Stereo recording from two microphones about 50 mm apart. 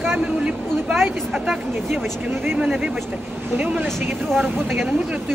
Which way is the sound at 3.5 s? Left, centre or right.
Right.